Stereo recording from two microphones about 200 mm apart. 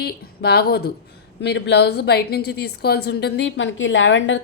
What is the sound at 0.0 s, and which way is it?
A woman's voice, 55° left (ahead or behind).